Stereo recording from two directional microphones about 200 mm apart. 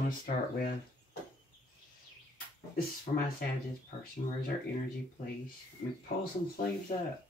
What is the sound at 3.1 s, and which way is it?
Speech, 35° left (ahead or behind).